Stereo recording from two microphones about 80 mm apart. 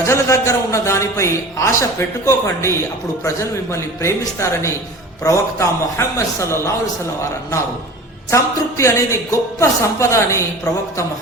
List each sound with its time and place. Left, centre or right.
0.0 s a man's voice: left
8.3 s a man's voice: left